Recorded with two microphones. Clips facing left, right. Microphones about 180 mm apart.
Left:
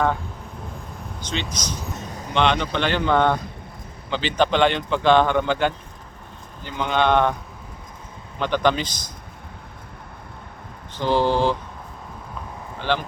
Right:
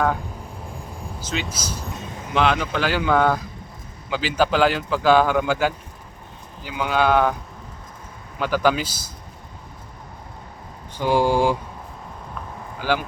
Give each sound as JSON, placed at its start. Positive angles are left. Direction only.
{"t": 1.2, "sound": "speech", "side_deg": -5}
{"t": 8.4, "sound": "speech", "side_deg": -5}
{"t": 10.9, "sound": "speech", "side_deg": -10}
{"t": 12.8, "sound": "speech", "side_deg": -10}